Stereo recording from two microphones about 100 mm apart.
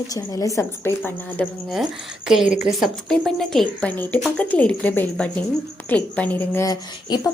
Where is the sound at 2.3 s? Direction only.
5° right (ahead or behind).